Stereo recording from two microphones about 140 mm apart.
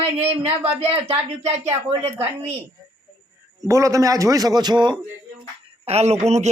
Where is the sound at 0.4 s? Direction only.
45° right (ahead or behind).